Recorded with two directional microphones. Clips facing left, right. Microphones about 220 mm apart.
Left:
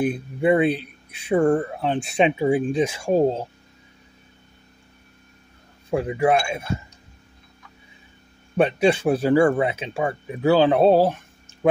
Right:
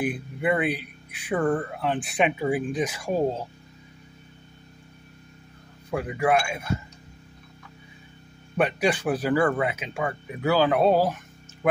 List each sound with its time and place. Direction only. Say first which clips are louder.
0.0 s speech: left 5 dB; 25° left (ahead or behind)
5.9 s speech: left 4 dB; 25° left (ahead or behind)
8.5 s speech: left 5 dB; 25° left (ahead or behind)